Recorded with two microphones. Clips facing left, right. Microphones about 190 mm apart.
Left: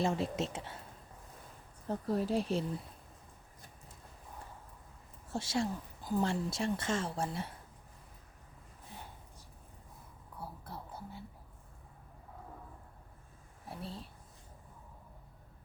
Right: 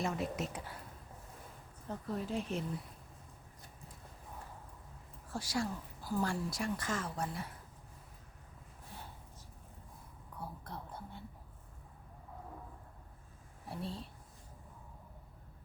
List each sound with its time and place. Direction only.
0.0 s a woman's voice: 30° left (ahead or behind)
1.9 s speech: 35° left (ahead or behind)
5.3 s a woman's voice: 25° left (ahead or behind)
10.4 s whispering: 5° left (ahead or behind)
13.7 s a woman's voice: centre (ahead or behind)